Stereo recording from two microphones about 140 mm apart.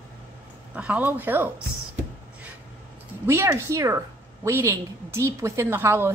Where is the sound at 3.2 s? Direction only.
20° right (ahead or behind).